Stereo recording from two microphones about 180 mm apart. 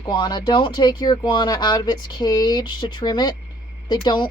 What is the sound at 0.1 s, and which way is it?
Speech, 25° left (ahead or behind).